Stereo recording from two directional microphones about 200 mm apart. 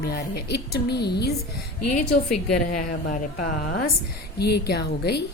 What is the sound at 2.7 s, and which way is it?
A woman's voice, 40° left (ahead or behind).